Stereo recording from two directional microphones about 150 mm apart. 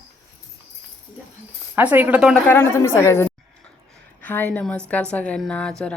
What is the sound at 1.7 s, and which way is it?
Speech, 10° right (ahead or behind).